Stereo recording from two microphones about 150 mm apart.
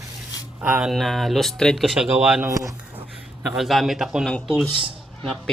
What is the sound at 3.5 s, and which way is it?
Speech, centre (ahead or behind).